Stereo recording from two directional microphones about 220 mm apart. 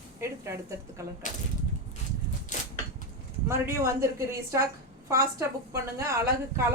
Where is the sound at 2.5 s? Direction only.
35° left (ahead or behind).